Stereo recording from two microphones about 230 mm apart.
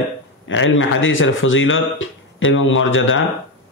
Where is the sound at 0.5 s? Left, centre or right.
Left.